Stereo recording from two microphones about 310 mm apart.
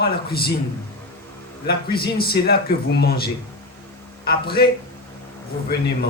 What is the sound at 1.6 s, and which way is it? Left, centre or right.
A man's voice, left.